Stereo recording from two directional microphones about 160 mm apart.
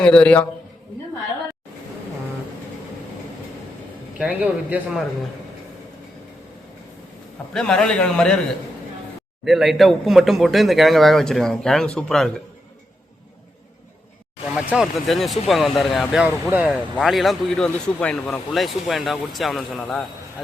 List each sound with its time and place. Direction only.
0.0 s a man's voice: 5° left (ahead or behind)
4.2 s a man's voice: 10° right (ahead or behind)
7.5 s speech: 5° left (ahead or behind)
9.4 s speech: centre (ahead or behind)
14.5 s a man's voice: 5° right (ahead or behind)
16.6 s speech: centre (ahead or behind)